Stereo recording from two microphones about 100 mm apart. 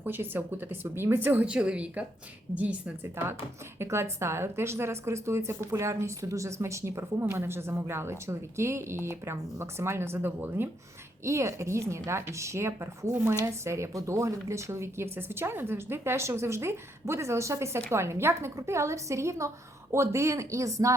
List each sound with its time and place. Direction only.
0.0 s a woman's voice: 20° right (ahead or behind)
3.0 s a woman's voice: 25° right (ahead or behind)